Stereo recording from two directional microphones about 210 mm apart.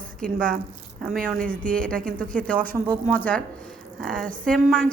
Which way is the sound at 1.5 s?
5° left (ahead or behind).